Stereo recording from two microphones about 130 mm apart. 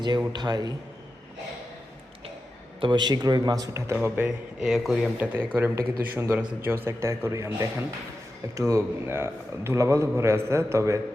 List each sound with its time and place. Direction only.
0.3 s speech: 30° right (ahead or behind)
2.8 s speech: 35° right (ahead or behind)
3.9 s a man's voice: 10° right (ahead or behind)